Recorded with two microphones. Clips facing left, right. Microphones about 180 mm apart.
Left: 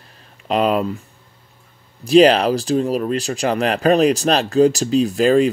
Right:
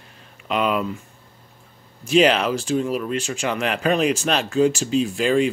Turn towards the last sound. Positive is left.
turn(degrees=40)  # may be behind; listen again after turning